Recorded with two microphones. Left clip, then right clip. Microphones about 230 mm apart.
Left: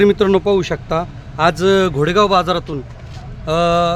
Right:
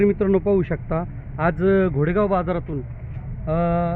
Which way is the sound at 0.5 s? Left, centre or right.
Centre.